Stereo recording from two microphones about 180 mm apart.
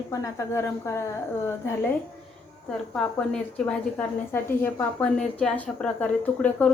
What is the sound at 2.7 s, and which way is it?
A woman's voice, 5° left (ahead or behind).